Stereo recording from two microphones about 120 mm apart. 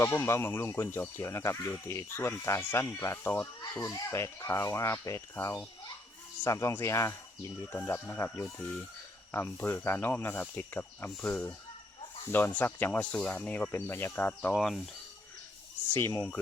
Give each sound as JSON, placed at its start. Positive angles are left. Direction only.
{"t": 0.0, "sound": "speech", "side_deg": 20}
{"t": 14.5, "sound": "speech", "side_deg": 0}
{"t": 15.9, "sound": "speech", "side_deg": 20}